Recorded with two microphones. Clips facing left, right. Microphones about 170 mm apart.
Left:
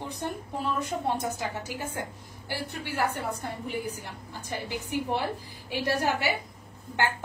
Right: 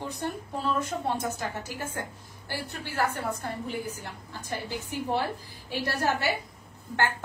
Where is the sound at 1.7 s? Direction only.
15° left (ahead or behind).